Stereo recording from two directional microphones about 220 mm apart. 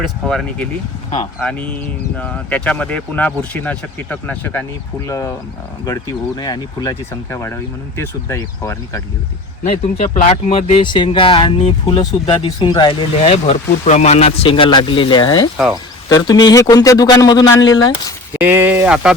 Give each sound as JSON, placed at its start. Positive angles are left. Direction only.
{"t": 0.0, "sound": "speech", "side_deg": 5}
{"t": 9.6, "sound": "speech", "side_deg": 30}
{"t": 18.3, "sound": "speech", "side_deg": -10}